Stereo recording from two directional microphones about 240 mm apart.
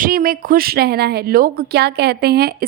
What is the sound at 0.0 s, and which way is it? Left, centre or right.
Speech, right.